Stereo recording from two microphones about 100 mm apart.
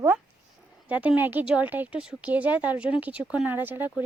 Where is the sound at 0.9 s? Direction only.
15° right (ahead or behind).